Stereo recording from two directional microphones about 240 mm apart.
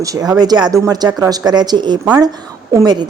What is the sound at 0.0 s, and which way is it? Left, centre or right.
A woman's voice, centre.